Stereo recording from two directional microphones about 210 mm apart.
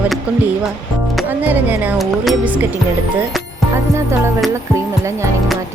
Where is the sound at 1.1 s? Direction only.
10° right (ahead or behind).